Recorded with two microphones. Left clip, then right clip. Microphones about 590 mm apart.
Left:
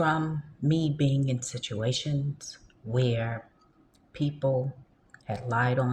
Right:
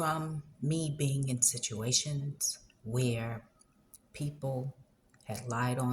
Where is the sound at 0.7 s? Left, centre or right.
Right.